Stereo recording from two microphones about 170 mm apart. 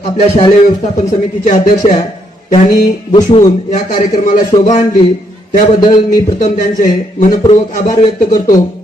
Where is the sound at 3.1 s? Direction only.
30° left (ahead or behind).